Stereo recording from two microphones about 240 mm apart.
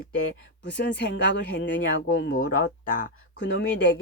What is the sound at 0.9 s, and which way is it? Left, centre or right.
Speech, left.